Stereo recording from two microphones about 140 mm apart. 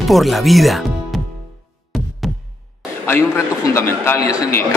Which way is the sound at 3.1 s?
20° left (ahead or behind).